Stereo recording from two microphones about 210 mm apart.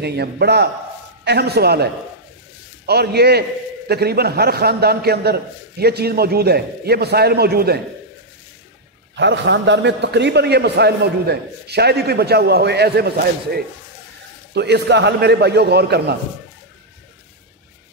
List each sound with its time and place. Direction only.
0.0 s a man's voice: 50° right (ahead or behind)
2.9 s a man's voice: 50° right (ahead or behind)
9.1 s a man's voice: 55° right (ahead or behind)